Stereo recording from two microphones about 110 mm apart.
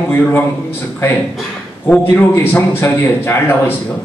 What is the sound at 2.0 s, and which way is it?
A man's voice, 25° left (ahead or behind).